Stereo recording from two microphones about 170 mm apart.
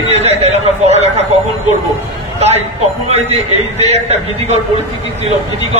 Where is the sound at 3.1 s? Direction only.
40° right (ahead or behind).